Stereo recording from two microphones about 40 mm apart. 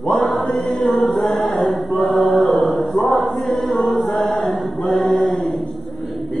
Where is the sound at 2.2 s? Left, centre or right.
Left.